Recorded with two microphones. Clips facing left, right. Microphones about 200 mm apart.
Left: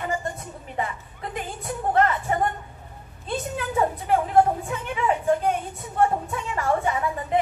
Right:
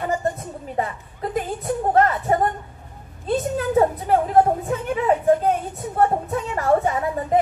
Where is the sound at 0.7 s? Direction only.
40° right (ahead or behind).